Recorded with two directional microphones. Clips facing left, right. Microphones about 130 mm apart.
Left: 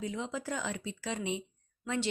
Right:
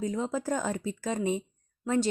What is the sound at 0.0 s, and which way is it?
Speech, 40° right (ahead or behind).